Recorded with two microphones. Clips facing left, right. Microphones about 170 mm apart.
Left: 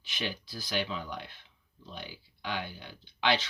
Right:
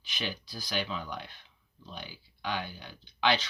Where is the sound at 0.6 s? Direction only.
20° left (ahead or behind).